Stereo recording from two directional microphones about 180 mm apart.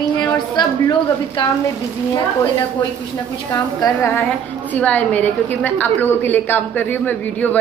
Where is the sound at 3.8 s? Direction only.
15° left (ahead or behind).